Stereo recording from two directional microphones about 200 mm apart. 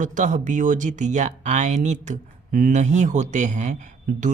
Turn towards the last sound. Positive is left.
turn(degrees=-40)  # may be behind; listen again after turning